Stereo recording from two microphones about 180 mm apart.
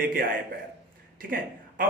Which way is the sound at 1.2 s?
50° right (ahead or behind).